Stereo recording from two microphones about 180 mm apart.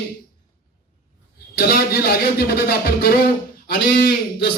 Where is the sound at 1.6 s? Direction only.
55° left (ahead or behind).